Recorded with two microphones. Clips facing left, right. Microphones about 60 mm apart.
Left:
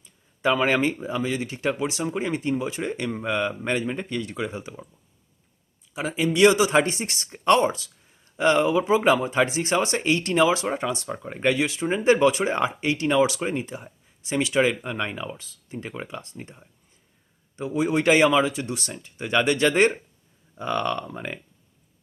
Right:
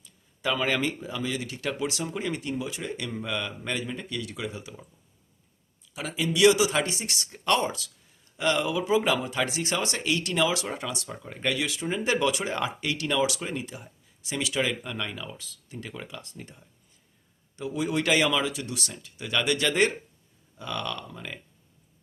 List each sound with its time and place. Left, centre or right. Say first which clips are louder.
0.0 s speech: left 6 dB; left
5.9 s speech: left 5 dB; left